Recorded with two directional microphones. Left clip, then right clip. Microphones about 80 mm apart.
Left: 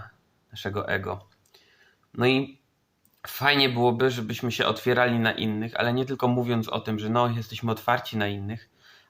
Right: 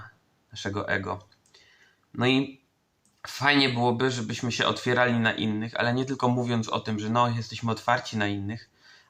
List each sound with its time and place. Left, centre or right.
0.5 s clicking: left
3.2 s speech: left